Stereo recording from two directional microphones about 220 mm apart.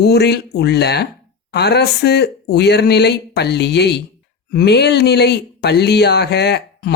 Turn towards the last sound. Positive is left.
turn(degrees=50)  # may be behind; listen again after turning